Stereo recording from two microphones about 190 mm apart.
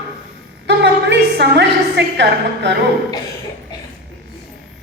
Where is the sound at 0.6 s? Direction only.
65° right (ahead or behind).